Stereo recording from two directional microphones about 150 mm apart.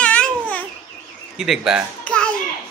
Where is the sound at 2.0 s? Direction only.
5° left (ahead or behind).